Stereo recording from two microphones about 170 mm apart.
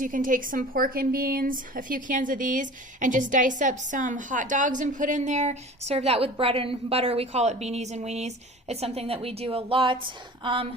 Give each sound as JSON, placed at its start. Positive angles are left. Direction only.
{"t": 0.0, "sound": "a woman's voice", "side_deg": -55}